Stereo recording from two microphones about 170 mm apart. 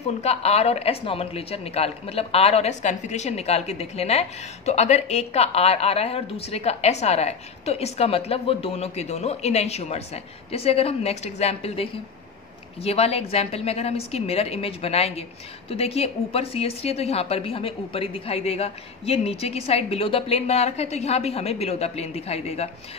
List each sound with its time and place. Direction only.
0.0 s a woman's voice: 40° left (ahead or behind)